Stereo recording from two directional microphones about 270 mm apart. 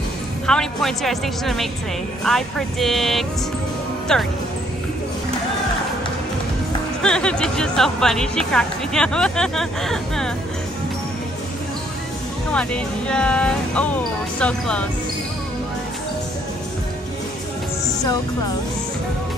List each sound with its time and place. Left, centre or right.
0.5 s speech: centre
7.0 s speech: centre
12.5 s speech: centre